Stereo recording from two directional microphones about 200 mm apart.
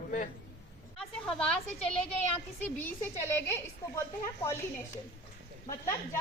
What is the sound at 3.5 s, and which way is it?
A woman's voice, 15° left (ahead or behind).